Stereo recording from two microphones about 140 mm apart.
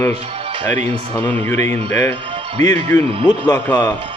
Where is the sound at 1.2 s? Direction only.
10° left (ahead or behind).